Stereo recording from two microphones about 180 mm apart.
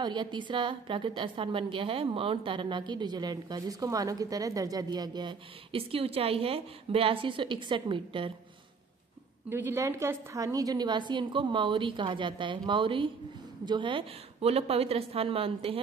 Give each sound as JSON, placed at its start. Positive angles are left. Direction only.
{"t": 0.0, "sound": "a woman's voice", "side_deg": -25}
{"t": 9.5, "sound": "a woman's voice", "side_deg": -15}